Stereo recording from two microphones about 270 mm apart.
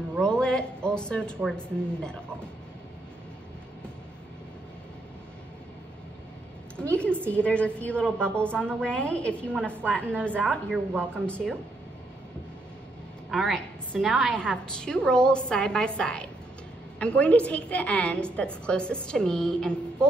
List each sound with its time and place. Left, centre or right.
0.1 s a woman's voice: centre
6.8 s a sound: centre
7.2 s a woman's voice: centre
13.3 s a woman's voice: centre